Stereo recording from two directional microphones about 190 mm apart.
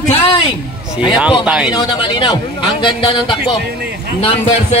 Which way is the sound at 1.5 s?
5° right (ahead or behind).